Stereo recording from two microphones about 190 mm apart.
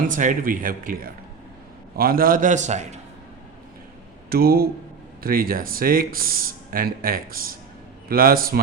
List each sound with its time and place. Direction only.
0.1 s speech: 45° right (ahead or behind)
4.3 s speech: 55° right (ahead or behind)